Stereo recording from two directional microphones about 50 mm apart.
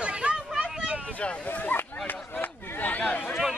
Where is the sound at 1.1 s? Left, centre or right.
Left.